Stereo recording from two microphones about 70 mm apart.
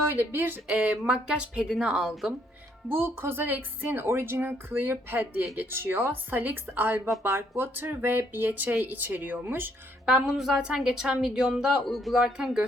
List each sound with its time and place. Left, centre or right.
0.1 s speech: right
0.7 s a woman's voice: right
2.9 s speech: right
10.1 s a woman's voice: centre